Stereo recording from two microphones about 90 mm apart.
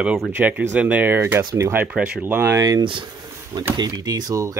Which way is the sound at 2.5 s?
40° right (ahead or behind).